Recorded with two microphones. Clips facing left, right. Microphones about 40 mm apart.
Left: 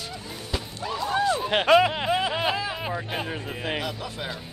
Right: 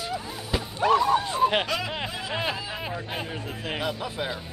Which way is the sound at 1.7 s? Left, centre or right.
Left.